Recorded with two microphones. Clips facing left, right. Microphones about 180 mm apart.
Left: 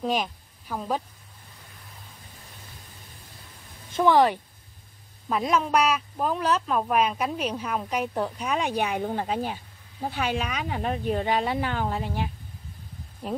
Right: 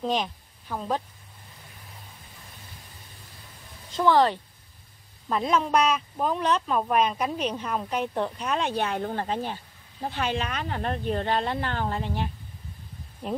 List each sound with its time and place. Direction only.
0.0 s speech: 5° left (ahead or behind)
3.9 s speech: 15° left (ahead or behind)